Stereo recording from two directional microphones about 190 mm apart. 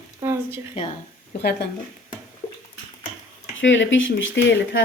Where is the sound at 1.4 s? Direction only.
60° left (ahead or behind).